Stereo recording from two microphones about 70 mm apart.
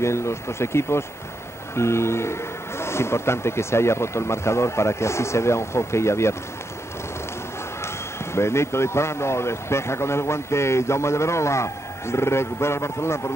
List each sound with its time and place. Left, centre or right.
0.0 s a man's voice: left
7.8 s a man's voice: left